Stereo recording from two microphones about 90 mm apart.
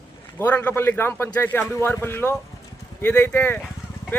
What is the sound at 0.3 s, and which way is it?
A man's voice, 20° left (ahead or behind).